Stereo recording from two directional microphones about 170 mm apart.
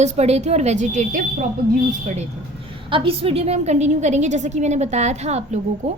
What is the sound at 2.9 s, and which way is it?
A woman's voice, 30° right (ahead or behind).